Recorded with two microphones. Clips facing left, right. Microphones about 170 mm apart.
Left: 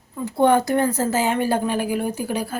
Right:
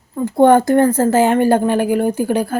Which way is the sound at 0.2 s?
50° right (ahead or behind).